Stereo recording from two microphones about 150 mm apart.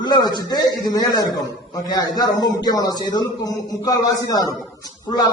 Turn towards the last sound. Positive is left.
turn(degrees=25)  # may be behind; listen again after turning